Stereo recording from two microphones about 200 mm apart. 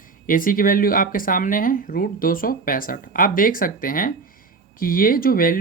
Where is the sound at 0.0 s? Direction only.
45° left (ahead or behind).